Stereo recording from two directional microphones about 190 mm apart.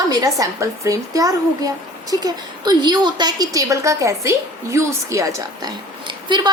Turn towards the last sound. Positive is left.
turn(degrees=-20)  # may be behind; listen again after turning